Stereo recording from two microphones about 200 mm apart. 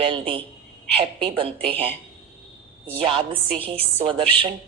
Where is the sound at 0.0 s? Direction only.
25° right (ahead or behind).